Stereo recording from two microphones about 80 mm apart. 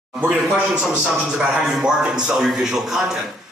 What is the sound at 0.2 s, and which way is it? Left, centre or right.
A man's voice, centre.